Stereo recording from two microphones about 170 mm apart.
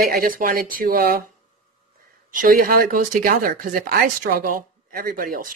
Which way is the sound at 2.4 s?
55° right (ahead or behind).